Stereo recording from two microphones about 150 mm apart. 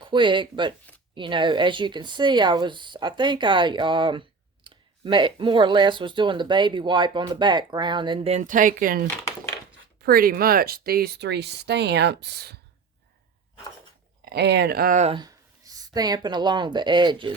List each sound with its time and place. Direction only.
0.0 s speech: 35° right (ahead or behind); by 9.0 s 65° right (ahead or behind)
10.0 s speech: 85° right
14.3 s speech: 90° right
15.1 s speech: 25° right (ahead or behind)